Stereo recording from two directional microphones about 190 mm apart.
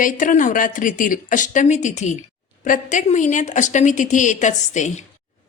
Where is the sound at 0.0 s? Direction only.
45° left (ahead or behind).